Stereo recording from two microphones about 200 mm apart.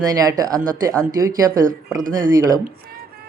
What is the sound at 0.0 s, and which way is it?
Speech, 20° right (ahead or behind).